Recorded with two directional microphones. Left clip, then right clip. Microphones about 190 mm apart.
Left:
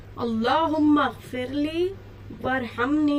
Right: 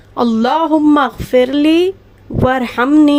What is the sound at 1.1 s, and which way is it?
Speech, centre (ahead or behind).